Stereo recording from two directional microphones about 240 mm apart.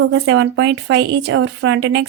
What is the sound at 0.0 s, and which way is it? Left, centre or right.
Speech, right.